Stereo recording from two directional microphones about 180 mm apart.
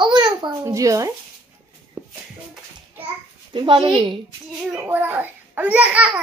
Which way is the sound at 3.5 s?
30° right (ahead or behind).